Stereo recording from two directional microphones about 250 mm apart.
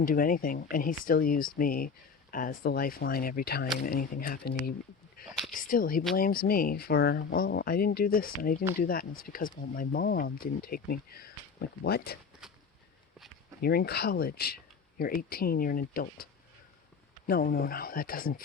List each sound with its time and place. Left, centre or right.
0.0 s speech: left
5.5 s speech: left
13.6 s speech: left